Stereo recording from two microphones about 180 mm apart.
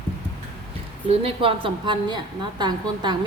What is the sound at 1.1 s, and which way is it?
A woman's voice, 30° right (ahead or behind).